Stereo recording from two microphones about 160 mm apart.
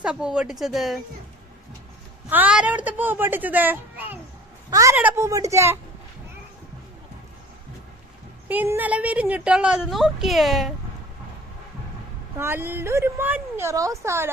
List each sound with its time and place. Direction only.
0.0 s a woman's voice: 5° right (ahead or behind)
2.3 s a woman's voice: 10° right (ahead or behind)
8.4 s a woman's voice: 15° right (ahead or behind)
12.4 s a woman's voice: 15° right (ahead or behind)